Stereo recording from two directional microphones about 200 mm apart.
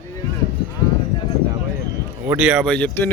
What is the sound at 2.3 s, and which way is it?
Speech, 5° right (ahead or behind).